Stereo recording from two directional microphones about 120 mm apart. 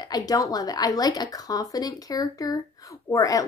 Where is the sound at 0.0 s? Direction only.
35° left (ahead or behind).